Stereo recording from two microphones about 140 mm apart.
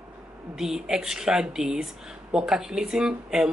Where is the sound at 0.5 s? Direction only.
5° right (ahead or behind).